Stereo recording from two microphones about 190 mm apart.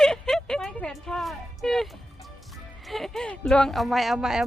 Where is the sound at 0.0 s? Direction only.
Centre (ahead or behind).